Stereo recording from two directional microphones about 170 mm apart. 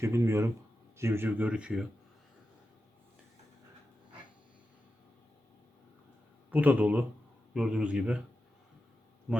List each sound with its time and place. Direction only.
0.0 s speech: 15° right (ahead or behind)
6.5 s a man's voice: 10° right (ahead or behind)